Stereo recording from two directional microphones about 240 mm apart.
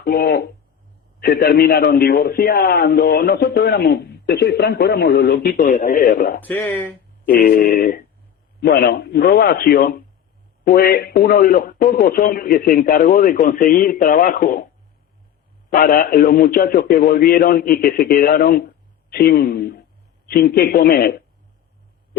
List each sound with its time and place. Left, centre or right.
0.0 s a man's voice: left
6.4 s speech: centre
7.4 s a man's voice: left
15.7 s a man's voice: left